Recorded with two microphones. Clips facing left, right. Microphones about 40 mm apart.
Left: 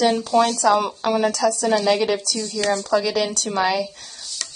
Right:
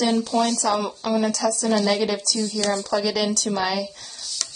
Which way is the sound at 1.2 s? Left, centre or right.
Left.